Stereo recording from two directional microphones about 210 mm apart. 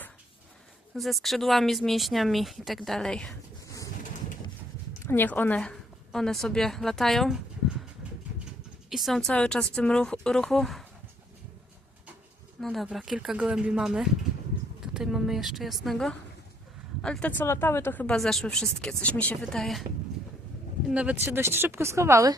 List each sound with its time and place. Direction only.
0.9 s speech: centre (ahead or behind)
5.0 s a woman's voice: 10° left (ahead or behind)
8.9 s speech: centre (ahead or behind)
12.5 s speech: centre (ahead or behind)
20.9 s speech: 5° right (ahead or behind)